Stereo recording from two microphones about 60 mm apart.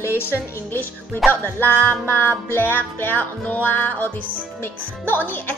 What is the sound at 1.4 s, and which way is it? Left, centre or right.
Music, left.